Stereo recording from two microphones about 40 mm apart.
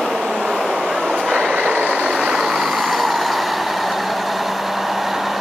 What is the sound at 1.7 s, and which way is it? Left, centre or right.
Vehicle, right.